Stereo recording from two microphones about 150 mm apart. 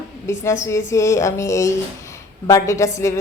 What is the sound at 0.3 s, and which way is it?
A woman's voice, 20° left (ahead or behind).